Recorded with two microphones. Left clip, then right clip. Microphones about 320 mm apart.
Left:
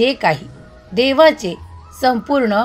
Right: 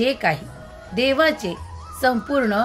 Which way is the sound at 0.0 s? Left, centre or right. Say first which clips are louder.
Left 5 dB; centre.